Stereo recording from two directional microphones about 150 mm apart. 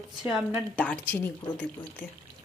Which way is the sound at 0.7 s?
10° left (ahead or behind).